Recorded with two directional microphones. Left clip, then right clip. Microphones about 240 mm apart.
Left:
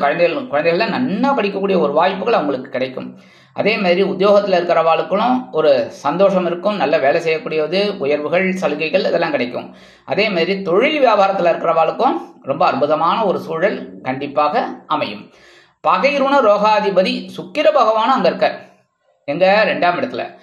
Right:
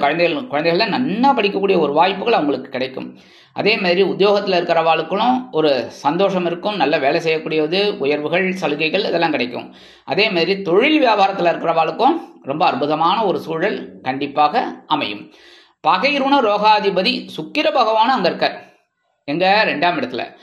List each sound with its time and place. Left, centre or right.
0.0 s a man's voice: right
3.5 s a man's voice: right